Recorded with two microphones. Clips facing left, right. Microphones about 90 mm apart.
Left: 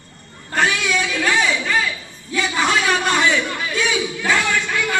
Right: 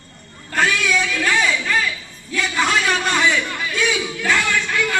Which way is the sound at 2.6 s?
10° left (ahead or behind).